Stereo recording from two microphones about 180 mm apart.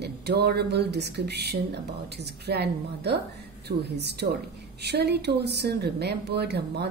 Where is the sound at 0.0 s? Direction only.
65° right (ahead or behind).